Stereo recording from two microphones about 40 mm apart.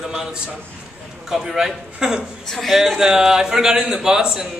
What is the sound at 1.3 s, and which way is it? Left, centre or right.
Speech, centre.